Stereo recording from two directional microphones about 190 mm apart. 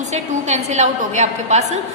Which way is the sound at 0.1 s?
35° right (ahead or behind).